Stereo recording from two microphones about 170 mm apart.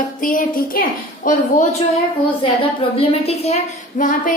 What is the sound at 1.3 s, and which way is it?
Speech, 40° left (ahead or behind).